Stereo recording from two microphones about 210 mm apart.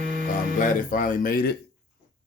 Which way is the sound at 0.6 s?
40° left (ahead or behind).